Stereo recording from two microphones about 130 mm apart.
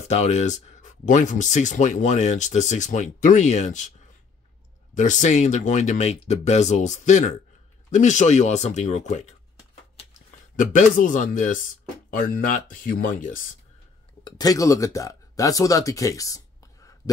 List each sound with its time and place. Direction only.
0.1 s speech: 55° left (ahead or behind)
4.9 s speech: 70° left (ahead or behind)
10.5 s speech: 85° left
12.2 s speech: 90° left
14.2 s speech: 30° left (ahead or behind)